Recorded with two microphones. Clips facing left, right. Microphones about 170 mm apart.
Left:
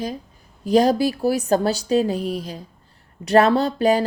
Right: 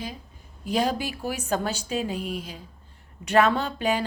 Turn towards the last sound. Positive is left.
turn(degrees=40)  # may be behind; listen again after turning